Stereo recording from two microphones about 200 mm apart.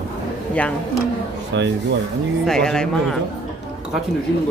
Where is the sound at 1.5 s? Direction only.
65° right (ahead or behind).